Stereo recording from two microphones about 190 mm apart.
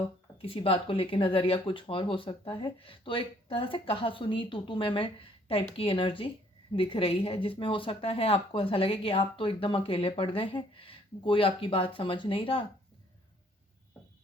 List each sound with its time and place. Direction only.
0.4 s speech: 30° left (ahead or behind)